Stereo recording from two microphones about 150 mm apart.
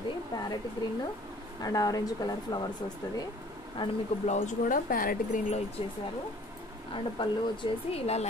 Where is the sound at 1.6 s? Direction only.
25° left (ahead or behind).